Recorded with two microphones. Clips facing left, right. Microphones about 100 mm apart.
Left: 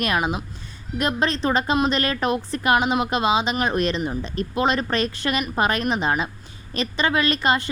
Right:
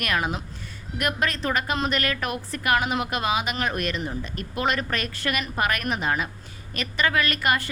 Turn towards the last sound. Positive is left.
turn(degrees=25)  # may be behind; listen again after turning